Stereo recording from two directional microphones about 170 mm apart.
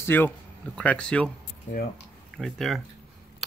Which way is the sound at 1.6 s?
65° left (ahead or behind).